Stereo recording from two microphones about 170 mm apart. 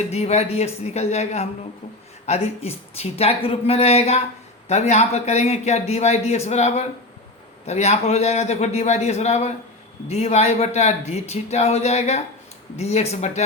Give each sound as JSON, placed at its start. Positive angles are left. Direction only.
{"t": 0.1, "sound": "a man's voice", "side_deg": 40}